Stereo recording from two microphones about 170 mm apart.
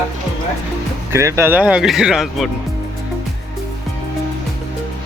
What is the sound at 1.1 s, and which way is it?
Speech, 15° right (ahead or behind).